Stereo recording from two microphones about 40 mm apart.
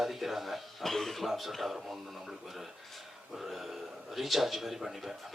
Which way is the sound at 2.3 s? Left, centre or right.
Centre.